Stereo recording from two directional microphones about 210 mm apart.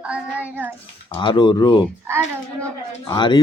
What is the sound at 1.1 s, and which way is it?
Speech, 20° left (ahead or behind).